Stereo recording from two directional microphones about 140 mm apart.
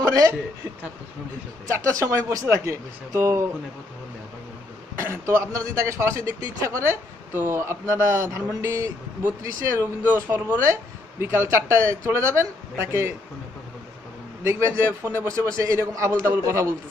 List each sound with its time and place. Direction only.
0.0 s a woman's voice: 25° right (ahead or behind)
1.7 s a man's voice: 20° right (ahead or behind)
4.9 s a man's voice: 20° right (ahead or behind)
14.4 s a man's voice: 20° right (ahead or behind)